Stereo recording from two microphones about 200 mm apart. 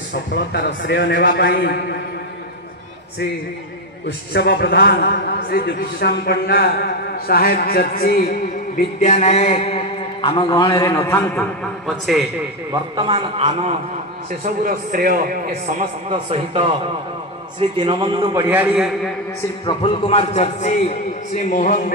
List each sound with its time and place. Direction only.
0.1 s a man's voice: 60° left (ahead or behind)
4.3 s a man's voice: 50° left (ahead or behind); by 10.4 s 30° left (ahead or behind)
10.5 s a man's voice: 15° left (ahead or behind)
12.9 s a man's voice: 25° right (ahead or behind)
14.4 s a man's voice: 45° right (ahead or behind)
16.1 s a man's voice: 30° right (ahead or behind)
18.5 s a man's voice: 10° right (ahead or behind)
19.6 s a man's voice: 25° left (ahead or behind)